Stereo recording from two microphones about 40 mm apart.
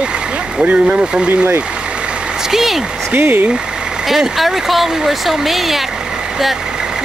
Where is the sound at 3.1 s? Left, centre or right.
Right.